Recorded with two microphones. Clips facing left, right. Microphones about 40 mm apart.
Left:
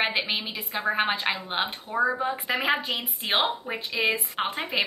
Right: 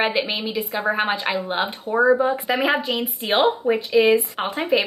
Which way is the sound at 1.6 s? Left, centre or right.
Centre.